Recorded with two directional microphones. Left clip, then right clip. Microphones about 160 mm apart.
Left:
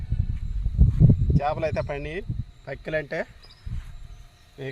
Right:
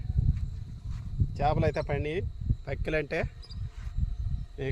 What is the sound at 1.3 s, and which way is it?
Speech, 50° right (ahead or behind).